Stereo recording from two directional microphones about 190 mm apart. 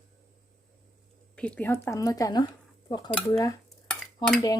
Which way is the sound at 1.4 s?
5° left (ahead or behind).